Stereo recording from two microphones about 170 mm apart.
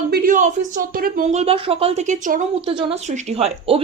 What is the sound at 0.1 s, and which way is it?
A woman's voice, 55° right (ahead or behind).